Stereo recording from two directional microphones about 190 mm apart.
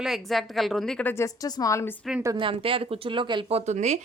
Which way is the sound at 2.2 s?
20° right (ahead or behind).